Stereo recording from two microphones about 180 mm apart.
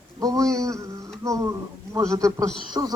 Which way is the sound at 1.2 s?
15° right (ahead or behind).